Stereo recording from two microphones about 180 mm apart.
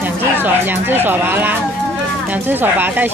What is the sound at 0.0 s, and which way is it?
Speech, 10° right (ahead or behind).